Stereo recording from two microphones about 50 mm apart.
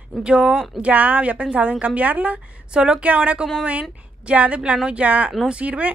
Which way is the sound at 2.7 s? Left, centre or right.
Centre.